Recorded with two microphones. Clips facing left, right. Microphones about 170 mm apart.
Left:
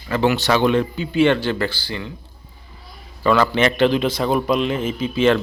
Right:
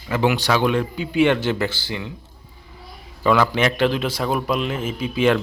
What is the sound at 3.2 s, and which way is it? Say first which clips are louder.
A man's voice: left 1 dB; 10° right (ahead or behind).